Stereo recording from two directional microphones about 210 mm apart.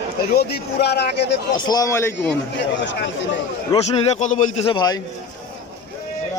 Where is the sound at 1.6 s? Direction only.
15° left (ahead or behind).